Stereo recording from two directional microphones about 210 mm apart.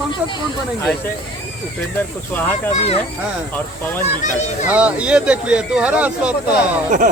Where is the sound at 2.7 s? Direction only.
30° left (ahead or behind).